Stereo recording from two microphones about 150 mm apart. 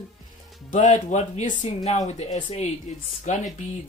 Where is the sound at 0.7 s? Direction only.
50° left (ahead or behind).